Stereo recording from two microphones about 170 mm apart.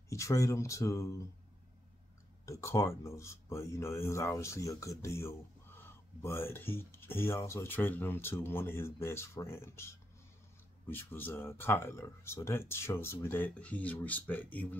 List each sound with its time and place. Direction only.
0.1 s speech: 20° left (ahead or behind)
2.4 s speech: 15° left (ahead or behind)